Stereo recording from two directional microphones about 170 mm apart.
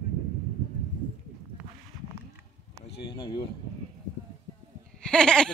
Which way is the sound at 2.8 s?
30° left (ahead or behind).